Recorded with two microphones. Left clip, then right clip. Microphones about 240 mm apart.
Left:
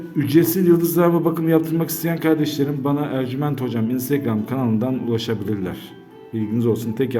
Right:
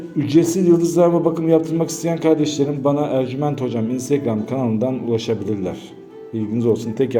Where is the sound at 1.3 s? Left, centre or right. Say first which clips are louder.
Right 2 dB; centre.